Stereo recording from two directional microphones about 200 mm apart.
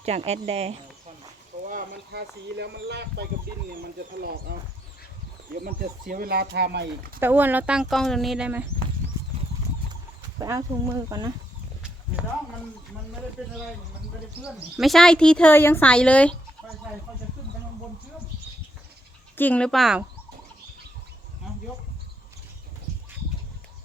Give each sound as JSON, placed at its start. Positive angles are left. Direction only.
{"t": 0.0, "sound": "speech", "side_deg": -30}
{"t": 1.7, "sound": "speech", "side_deg": -55}
{"t": 5.5, "sound": "speech", "side_deg": -45}
{"t": 7.2, "sound": "speech", "side_deg": -10}
{"t": 9.9, "sound": "speech", "side_deg": -15}
{"t": 13.4, "sound": "speech", "side_deg": -5}
{"t": 19.4, "sound": "speech", "side_deg": 5}